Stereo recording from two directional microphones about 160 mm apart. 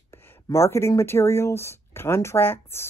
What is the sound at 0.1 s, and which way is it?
Speech, 15° left (ahead or behind).